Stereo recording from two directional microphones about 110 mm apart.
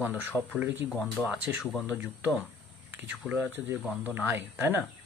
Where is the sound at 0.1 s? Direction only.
10° right (ahead or behind).